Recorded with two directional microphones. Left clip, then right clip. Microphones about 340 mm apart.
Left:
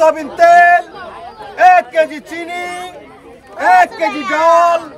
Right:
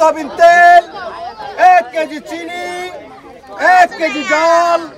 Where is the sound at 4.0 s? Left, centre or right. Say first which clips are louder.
Even; centre.